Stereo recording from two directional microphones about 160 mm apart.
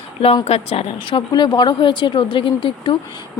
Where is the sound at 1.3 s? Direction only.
25° left (ahead or behind).